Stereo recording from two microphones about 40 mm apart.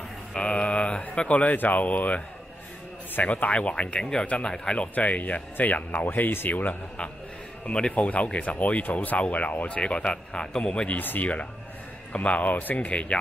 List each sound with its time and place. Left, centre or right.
0.4 s a sound: left
1.1 s speech: left
1.4 s speech: left
3.3 s speech: left
4.9 s speech: left
7.6 s speech: left
7.9 s speech: left
9.8 s speech: left
11.0 s speech: left
12.1 s speech: left
12.4 s speech: left
12.7 s speech: left